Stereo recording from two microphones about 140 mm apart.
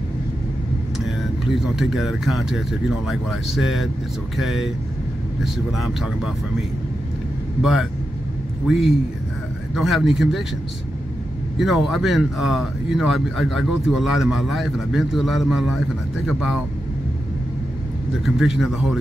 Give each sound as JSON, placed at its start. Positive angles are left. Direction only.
{"t": 1.8, "sound": "speech", "side_deg": 0}
{"t": 8.6, "sound": "speech", "side_deg": 0}
{"t": 11.5, "sound": "speech", "side_deg": 0}
{"t": 18.2, "sound": "speech", "side_deg": 0}